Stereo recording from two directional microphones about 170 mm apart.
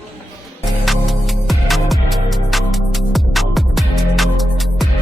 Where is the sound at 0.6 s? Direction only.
Centre (ahead or behind).